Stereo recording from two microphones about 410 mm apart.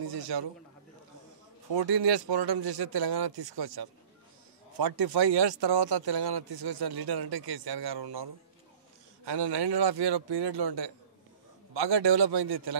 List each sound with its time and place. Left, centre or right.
0.0 s a man's voice: right
1.7 s a man's voice: right
4.7 s speech: right
9.2 s a man's voice: right